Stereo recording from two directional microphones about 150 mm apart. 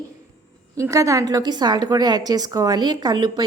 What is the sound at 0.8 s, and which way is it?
A woman's voice, 20° right (ahead or behind).